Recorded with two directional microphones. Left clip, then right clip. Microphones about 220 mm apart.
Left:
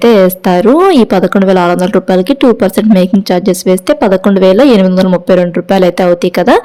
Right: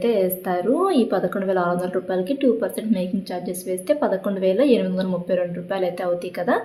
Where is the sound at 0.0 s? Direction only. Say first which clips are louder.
Left 14 dB; 45° left (ahead or behind).